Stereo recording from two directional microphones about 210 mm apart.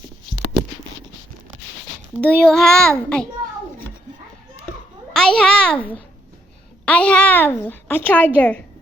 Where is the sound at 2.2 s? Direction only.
5° left (ahead or behind).